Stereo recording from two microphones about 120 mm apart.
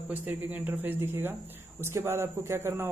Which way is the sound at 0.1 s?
15° right (ahead or behind).